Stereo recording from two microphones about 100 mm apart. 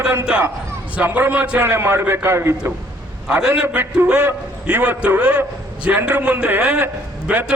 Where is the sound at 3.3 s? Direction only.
10° right (ahead or behind).